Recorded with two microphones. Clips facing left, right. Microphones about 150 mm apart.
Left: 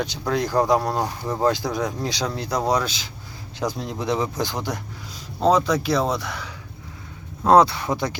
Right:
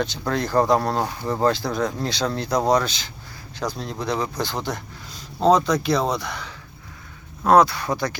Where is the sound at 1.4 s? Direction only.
15° left (ahead or behind).